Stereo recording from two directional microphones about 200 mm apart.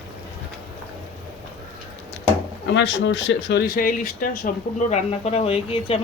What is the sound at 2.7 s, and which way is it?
Speech, 65° left (ahead or behind).